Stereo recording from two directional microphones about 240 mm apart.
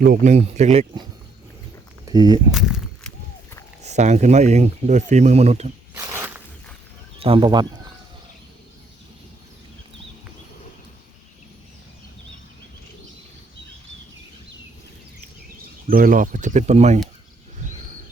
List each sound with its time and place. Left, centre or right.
0.0 s speech: right
2.0 s speech: centre
2.5 s walk: centre
3.8 s speech: right
5.9 s a sound: centre
7.2 s speech: right
15.9 s speech: right